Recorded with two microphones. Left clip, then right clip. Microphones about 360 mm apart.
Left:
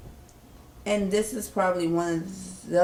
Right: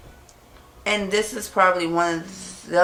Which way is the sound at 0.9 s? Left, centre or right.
Centre.